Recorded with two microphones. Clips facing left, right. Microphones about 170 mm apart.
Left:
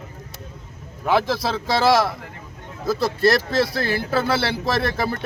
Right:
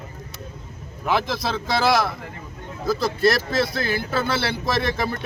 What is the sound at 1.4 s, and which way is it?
Speech, 30° left (ahead or behind).